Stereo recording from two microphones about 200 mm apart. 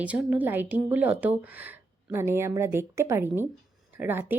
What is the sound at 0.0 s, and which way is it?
A woman's voice, 5° right (ahead or behind).